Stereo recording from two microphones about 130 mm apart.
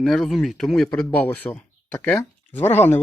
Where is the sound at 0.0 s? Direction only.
Centre (ahead or behind).